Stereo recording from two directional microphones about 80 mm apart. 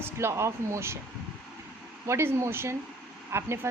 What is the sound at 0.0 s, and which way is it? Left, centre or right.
Speech, right.